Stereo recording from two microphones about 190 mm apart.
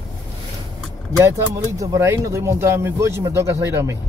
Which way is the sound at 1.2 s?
15° right (ahead or behind).